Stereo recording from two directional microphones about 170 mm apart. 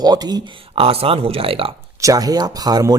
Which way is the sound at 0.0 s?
25° right (ahead or behind).